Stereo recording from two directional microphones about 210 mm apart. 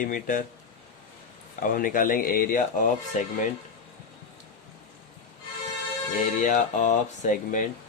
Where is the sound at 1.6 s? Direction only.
40° left (ahead or behind).